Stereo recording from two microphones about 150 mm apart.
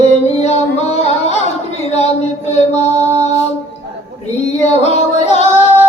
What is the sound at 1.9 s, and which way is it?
Mantra, 45° left (ahead or behind).